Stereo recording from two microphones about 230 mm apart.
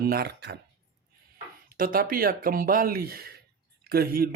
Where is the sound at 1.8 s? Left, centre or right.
Right.